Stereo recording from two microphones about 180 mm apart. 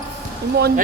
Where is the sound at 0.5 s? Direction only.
60° right (ahead or behind).